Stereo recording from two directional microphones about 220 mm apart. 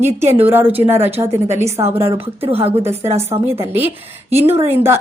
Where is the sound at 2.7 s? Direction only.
10° right (ahead or behind).